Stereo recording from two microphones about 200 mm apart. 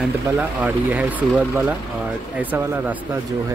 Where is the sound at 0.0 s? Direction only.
5° right (ahead or behind).